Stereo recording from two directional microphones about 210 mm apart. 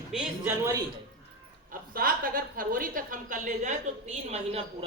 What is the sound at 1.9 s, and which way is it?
A woman's voice, 40° right (ahead or behind).